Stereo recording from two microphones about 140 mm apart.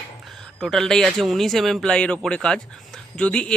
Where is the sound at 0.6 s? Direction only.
Centre (ahead or behind).